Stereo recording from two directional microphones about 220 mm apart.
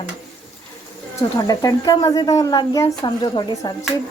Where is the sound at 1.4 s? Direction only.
15° left (ahead or behind).